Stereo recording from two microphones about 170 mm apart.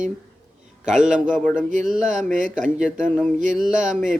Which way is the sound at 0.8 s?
5° right (ahead or behind).